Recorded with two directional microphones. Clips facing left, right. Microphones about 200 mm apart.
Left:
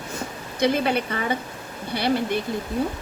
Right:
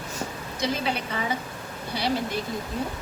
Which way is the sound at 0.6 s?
55° left (ahead or behind).